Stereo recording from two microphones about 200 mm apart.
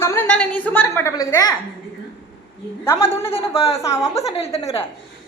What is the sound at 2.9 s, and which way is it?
Speech, 15° left (ahead or behind).